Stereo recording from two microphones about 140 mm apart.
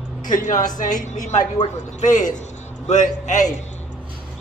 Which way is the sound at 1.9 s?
60° left (ahead or behind).